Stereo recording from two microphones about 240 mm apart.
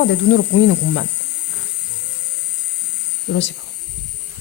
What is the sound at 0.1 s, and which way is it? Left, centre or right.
Speech, left.